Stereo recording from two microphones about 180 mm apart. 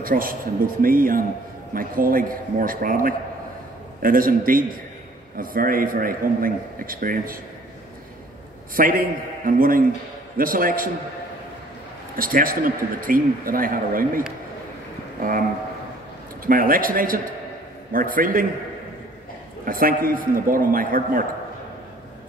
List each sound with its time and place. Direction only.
0.0 s a man's voice: 50° right (ahead or behind)
8.7 s a man's voice: 50° right (ahead or behind)
12.2 s a man's voice: 50° right (ahead or behind)
16.4 s a man's voice: 50° right (ahead or behind)
19.6 s a man's voice: 50° right (ahead or behind)